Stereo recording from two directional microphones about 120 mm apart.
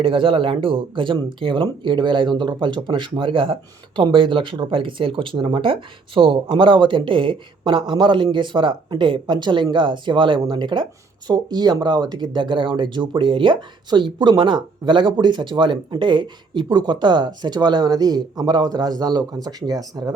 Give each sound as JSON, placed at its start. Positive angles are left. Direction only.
{"t": 0.0, "sound": "speech", "side_deg": -45}